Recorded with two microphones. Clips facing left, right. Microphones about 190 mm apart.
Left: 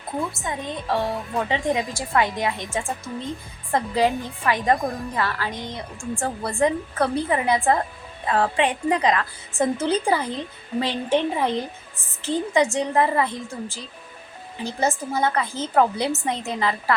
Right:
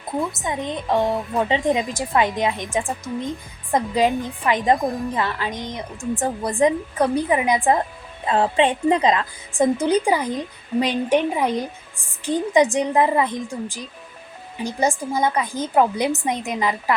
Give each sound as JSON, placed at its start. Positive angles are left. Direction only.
{"t": 0.3, "sound": "a woman's voice", "side_deg": -20}